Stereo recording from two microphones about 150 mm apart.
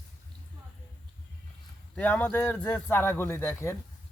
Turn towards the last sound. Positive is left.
turn(degrees=15)  # may be behind; listen again after turning